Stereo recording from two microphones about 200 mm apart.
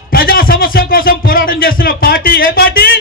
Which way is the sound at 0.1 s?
50° left (ahead or behind).